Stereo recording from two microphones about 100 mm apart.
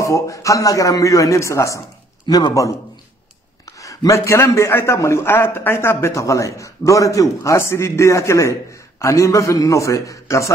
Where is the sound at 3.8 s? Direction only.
30° left (ahead or behind).